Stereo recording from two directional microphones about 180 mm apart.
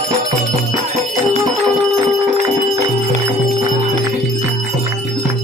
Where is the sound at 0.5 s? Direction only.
40° right (ahead or behind).